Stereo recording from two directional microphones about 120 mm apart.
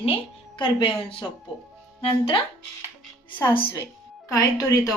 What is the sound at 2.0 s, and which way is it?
Speech, 50° left (ahead or behind).